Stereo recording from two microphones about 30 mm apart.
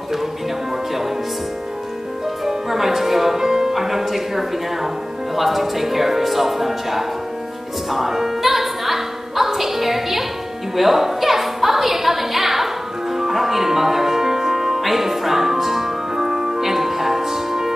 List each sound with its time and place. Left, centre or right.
2.4 s music: centre
3.4 s music: centre
3.7 s music: centre
5.3 s a woman's voice: centre
10.8 s music: centre